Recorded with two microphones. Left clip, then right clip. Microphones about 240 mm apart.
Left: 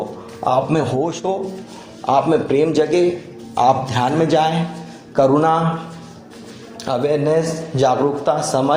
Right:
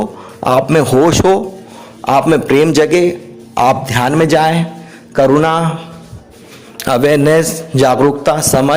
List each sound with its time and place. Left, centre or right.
0.4 s a man's voice: right
6.8 s a man's voice: right